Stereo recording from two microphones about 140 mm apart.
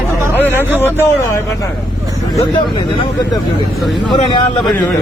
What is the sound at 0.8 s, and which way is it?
Speech, 20° left (ahead or behind).